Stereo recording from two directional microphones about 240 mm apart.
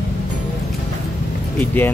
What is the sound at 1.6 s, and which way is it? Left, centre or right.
Speech, centre.